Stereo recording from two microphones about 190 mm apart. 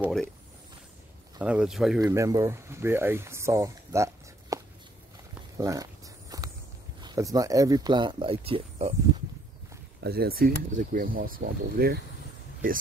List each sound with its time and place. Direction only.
0.0 s speech: 5° left (ahead or behind)
1.4 s speech: 5° right (ahead or behind)
2.0 s speech: 15° right (ahead or behind)
5.6 s walk: 20° right (ahead or behind)
7.0 s speech: 20° right (ahead or behind)
10.0 s speech: 55° right (ahead or behind)